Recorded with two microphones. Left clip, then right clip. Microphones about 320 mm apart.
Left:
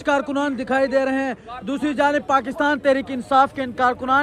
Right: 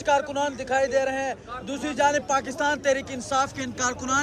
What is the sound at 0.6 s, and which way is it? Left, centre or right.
Speech, centre.